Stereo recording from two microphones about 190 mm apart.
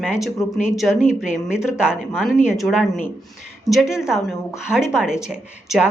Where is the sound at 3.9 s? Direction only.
5° right (ahead or behind).